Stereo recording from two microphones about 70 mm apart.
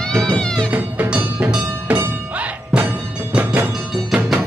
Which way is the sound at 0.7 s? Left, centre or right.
Right.